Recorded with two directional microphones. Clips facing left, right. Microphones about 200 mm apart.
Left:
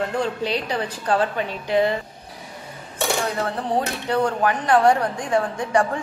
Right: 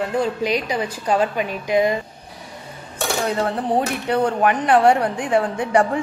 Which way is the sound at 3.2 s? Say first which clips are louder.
Right 3 dB; 20° right (ahead or behind).